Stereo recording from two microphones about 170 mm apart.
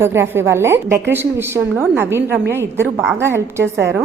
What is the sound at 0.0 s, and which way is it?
A woman's voice, 15° right (ahead or behind).